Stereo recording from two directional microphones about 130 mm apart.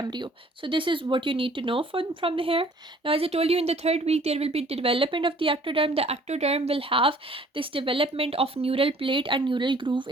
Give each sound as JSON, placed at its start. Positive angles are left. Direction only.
{"t": 0.0, "sound": "speech", "side_deg": -35}